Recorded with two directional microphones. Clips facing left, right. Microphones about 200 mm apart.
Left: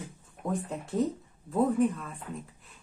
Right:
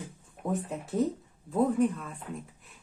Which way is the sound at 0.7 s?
Centre (ahead or behind).